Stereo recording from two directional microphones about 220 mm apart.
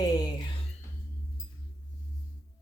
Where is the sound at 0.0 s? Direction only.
15° left (ahead or behind).